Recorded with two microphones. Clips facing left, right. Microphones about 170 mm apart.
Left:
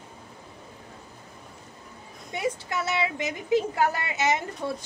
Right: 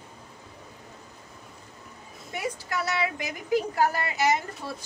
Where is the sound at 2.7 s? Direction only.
25° left (ahead or behind).